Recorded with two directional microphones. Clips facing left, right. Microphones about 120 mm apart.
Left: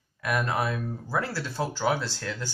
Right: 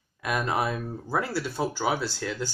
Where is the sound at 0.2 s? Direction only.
20° right (ahead or behind).